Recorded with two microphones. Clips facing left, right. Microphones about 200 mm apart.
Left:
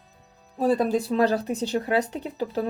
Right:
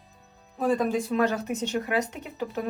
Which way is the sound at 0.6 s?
35° left (ahead or behind).